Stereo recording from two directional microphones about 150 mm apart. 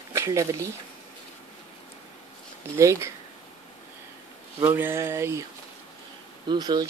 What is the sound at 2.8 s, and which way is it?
Speech, 20° right (ahead or behind).